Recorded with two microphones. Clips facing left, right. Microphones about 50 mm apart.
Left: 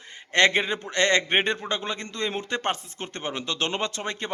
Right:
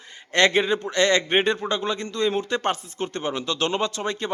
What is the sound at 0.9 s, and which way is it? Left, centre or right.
Speech, left.